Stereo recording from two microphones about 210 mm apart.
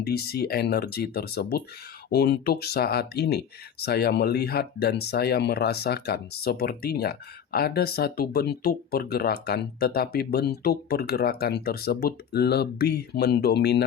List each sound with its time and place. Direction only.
0.0 s speech: 50° left (ahead or behind)